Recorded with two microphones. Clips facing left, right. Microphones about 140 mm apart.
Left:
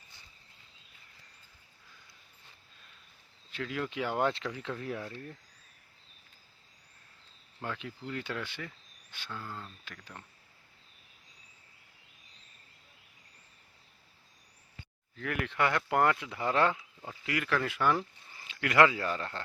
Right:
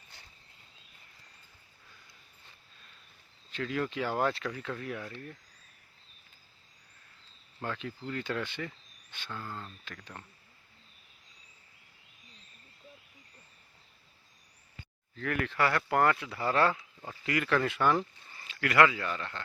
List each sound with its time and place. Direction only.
3.5 s speech: 5° left (ahead or behind); by 5.1 s 25° left (ahead or behind)
7.6 s speech: 10° left (ahead or behind)
15.1 s speech: 10° left (ahead or behind)
16.7 s speech: 5° left (ahead or behind)
18.4 s speech: 20° left (ahead or behind)